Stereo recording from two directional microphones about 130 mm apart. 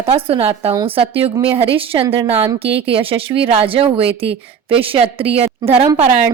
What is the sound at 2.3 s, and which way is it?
Speech, 20° right (ahead or behind).